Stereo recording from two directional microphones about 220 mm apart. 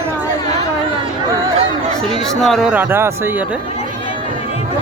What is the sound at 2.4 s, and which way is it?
A man's voice, centre (ahead or behind).